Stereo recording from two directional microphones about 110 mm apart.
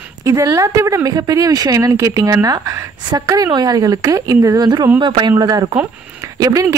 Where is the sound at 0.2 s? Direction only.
30° right (ahead or behind).